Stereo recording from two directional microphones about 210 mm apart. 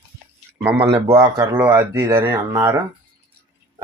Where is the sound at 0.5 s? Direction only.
10° right (ahead or behind).